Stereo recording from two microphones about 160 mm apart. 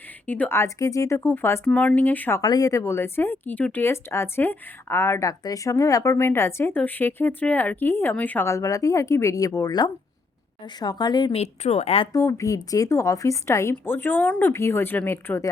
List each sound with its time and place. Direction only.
0.3 s speech: 10° left (ahead or behind)
2.4 s a woman's voice: 25° left (ahead or behind)
11.3 s a woman's voice: 40° left (ahead or behind)
12.1 s speech: 20° left (ahead or behind)